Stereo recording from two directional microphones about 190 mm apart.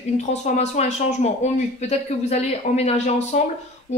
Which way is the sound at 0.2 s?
35° left (ahead or behind).